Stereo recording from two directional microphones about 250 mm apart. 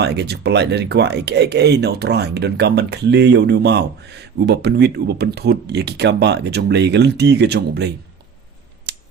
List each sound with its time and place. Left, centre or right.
0.0 s speech: right
8.9 s scissors: right